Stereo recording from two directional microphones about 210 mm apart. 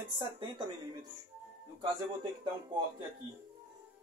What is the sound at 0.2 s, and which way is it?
Speech, 20° right (ahead or behind).